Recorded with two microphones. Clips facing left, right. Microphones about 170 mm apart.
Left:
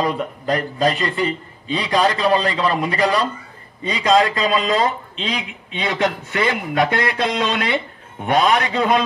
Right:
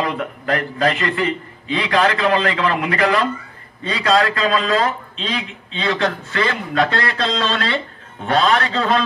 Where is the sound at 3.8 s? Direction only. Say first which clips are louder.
Left 1 dB; 15° left (ahead or behind).